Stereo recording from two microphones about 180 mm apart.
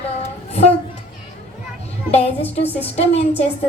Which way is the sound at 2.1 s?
35° left (ahead or behind).